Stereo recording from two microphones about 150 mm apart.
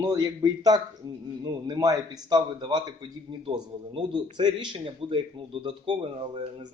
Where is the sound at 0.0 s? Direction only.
25° right (ahead or behind).